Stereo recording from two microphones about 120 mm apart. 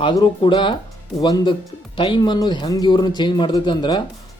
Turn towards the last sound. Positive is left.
turn(degrees=40)  # may be behind; listen again after turning